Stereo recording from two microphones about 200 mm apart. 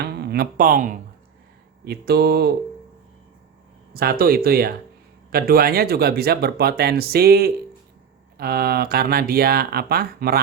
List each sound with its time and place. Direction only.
0.0 s speech: 55° right (ahead or behind)
3.9 s speech: 50° right (ahead or behind)